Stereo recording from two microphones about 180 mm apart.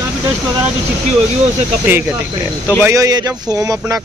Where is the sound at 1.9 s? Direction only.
10° right (ahead or behind).